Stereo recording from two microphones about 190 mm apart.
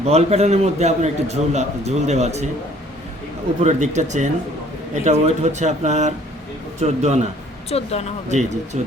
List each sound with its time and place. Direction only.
0.0 s a man's voice: 35° right (ahead or behind)
3.6 s a man's voice: 35° right (ahead or behind)
7.7 s speech: 35° left (ahead or behind)
8.3 s a man's voice: 35° right (ahead or behind)